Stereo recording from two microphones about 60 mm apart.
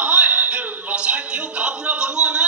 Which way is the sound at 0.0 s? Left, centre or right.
Right.